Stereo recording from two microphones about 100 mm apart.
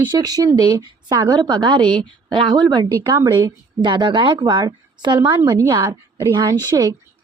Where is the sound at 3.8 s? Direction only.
50° right (ahead or behind).